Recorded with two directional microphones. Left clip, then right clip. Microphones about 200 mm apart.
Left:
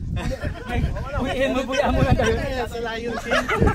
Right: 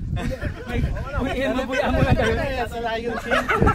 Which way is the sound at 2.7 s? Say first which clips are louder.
Right 2 dB; 50° right (ahead or behind).